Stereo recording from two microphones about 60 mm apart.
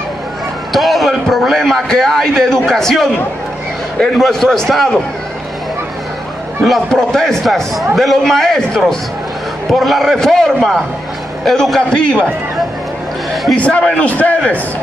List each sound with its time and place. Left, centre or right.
0.7 s a sound: centre
1.3 s a man's voice: centre
4.2 s a man's voice: centre
6.9 s a man's voice: centre
11.9 s a man's voice: centre
13.6 s a man's voice: left